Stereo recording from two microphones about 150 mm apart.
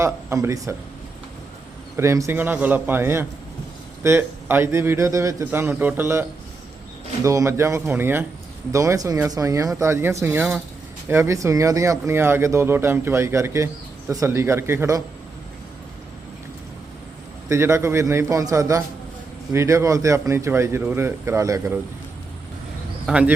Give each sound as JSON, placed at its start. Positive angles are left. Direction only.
{"t": 0.0, "sound": "speech", "side_deg": -20}
{"t": 2.0, "sound": "a man's voice", "side_deg": -20}
{"t": 7.3, "sound": "a man's voice", "side_deg": -20}
{"t": 17.5, "sound": "speech", "side_deg": -20}
{"t": 23.0, "sound": "a man's voice", "side_deg": -10}